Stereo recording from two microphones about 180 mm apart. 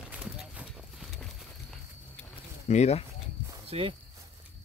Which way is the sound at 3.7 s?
30° right (ahead or behind).